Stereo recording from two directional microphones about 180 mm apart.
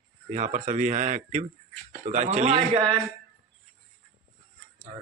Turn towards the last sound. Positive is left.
turn(degrees=-35)  # may be behind; listen again after turning